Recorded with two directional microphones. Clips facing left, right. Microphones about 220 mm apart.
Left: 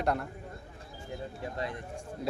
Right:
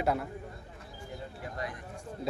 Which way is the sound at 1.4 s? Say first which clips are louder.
Left 3 dB; 25° left (ahead or behind).